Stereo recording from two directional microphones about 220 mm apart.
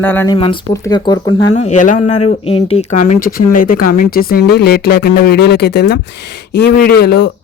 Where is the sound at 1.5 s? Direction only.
30° left (ahead or behind).